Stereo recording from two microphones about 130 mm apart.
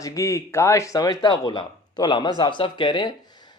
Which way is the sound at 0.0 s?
25° left (ahead or behind).